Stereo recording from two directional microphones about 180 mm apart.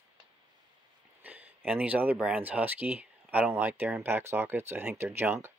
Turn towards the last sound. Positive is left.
turn(degrees=-15)  # may be behind; listen again after turning